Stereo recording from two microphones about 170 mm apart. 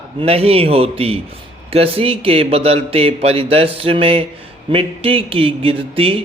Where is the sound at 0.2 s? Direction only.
35° right (ahead or behind).